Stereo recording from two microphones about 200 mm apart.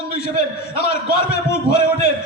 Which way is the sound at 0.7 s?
55° left (ahead or behind).